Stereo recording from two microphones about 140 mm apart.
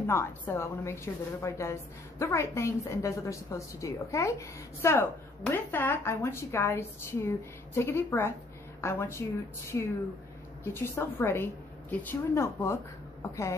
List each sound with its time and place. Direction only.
0.0 s a woman's voice: 15° left (ahead or behind)
10.6 s a woman's voice: 15° left (ahead or behind)